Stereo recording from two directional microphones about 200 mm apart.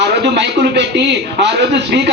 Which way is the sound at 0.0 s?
60° right (ahead or behind).